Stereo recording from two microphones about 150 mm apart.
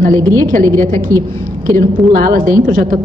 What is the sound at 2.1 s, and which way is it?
Speech, 70° right (ahead or behind).